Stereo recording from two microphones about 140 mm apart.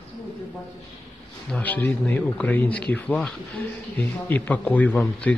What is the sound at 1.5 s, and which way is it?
A man's voice, 10° left (ahead or behind).